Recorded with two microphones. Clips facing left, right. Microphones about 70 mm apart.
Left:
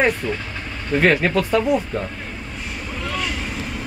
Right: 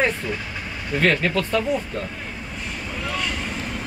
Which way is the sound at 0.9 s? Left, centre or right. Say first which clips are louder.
Left 3 dB; centre.